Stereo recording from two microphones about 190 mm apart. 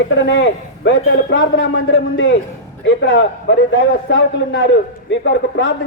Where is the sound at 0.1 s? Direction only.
75° left (ahead or behind).